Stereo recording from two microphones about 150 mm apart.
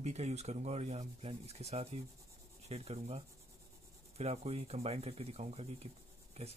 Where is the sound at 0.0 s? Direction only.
45° right (ahead or behind).